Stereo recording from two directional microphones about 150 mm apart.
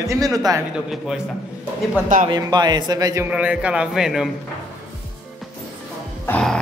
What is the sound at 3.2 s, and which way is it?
Speech, 10° right (ahead or behind).